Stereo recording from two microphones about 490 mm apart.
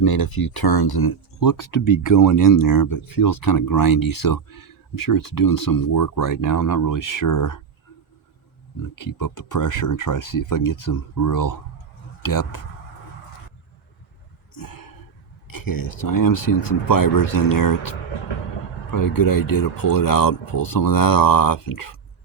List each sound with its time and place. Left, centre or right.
0.0 s speech: left
9.0 s speech: left
14.5 s a sound: left
15.4 s speech: left